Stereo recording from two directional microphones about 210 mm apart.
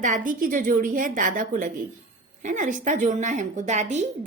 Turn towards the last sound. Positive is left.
turn(degrees=-35)  # may be behind; listen again after turning